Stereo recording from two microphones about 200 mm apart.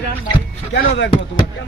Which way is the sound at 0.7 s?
60° left (ahead or behind).